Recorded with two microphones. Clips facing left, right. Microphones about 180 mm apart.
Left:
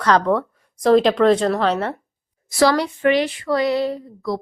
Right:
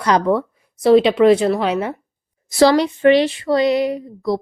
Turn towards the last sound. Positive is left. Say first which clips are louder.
# right 3 dB
turn(degrees=-15)  # may be behind; listen again after turning